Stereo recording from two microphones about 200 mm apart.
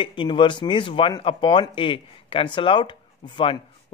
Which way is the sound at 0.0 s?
25° left (ahead or behind).